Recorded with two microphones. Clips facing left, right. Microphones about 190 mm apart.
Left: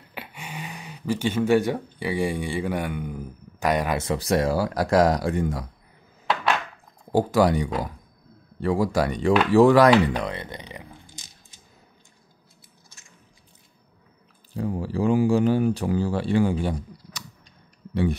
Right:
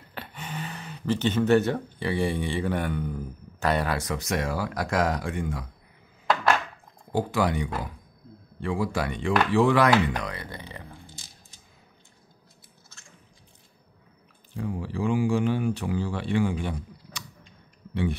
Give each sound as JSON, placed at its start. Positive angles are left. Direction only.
{"t": 0.1, "sound": "speech", "side_deg": 10}
{"t": 4.0, "sound": "speech", "side_deg": 30}
{"t": 7.1, "sound": "speech", "side_deg": 40}
{"t": 14.5, "sound": "speech", "side_deg": 40}